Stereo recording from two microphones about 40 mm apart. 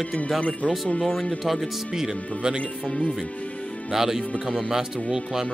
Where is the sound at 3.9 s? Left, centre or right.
Centre.